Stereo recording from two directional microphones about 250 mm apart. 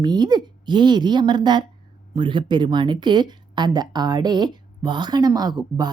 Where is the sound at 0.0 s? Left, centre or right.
Centre.